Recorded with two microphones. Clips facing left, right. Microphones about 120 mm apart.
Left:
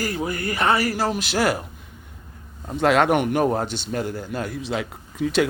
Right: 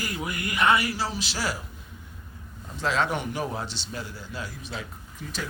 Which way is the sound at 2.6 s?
60° left (ahead or behind).